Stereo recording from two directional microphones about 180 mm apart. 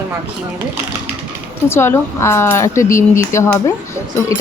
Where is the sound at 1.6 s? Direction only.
15° left (ahead or behind).